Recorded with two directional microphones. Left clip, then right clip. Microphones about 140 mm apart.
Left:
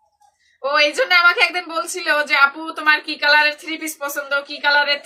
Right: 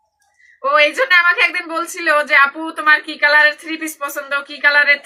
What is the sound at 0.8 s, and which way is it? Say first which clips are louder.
Speech: even; 25° left (ahead or behind).